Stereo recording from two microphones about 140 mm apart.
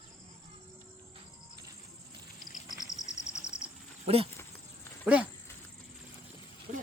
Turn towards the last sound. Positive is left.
turn(degrees=-10)  # may be behind; listen again after turning